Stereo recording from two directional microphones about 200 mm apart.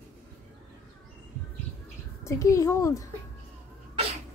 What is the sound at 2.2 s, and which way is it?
Speech, 15° left (ahead or behind).